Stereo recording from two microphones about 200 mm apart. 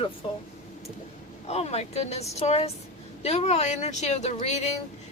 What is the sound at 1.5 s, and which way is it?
Speech, 30° left (ahead or behind).